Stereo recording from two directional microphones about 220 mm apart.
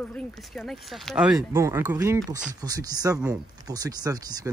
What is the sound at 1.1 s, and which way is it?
Speech, 5° right (ahead or behind).